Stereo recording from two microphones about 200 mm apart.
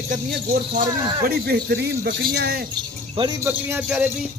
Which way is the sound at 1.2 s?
50° right (ahead or behind).